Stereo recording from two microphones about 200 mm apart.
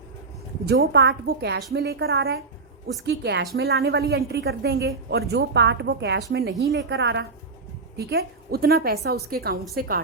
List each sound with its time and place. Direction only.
0.6 s a woman's voice: 55° right (ahead or behind)